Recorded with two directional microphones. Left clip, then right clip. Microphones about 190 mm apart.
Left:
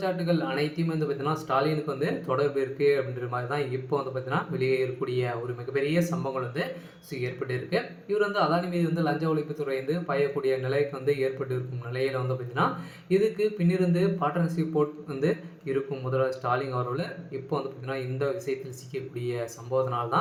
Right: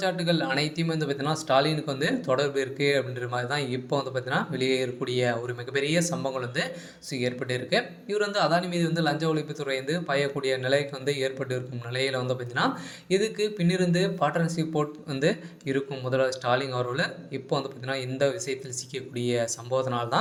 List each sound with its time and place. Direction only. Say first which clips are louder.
0.0 s speech: right 2 dB; 35° right (ahead or behind)
13.1 s speech: left 1 dB; 30° right (ahead or behind)